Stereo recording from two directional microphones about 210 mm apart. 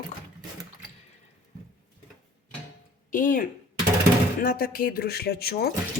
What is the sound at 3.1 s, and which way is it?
Speech, 40° left (ahead or behind).